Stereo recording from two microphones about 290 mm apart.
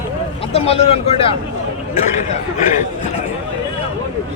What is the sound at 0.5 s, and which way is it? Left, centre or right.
Speech, centre.